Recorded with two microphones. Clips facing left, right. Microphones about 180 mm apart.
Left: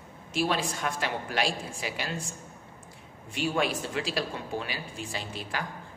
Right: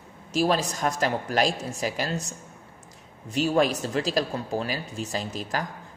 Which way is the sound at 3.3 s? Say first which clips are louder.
Right 6 dB; 40° right (ahead or behind).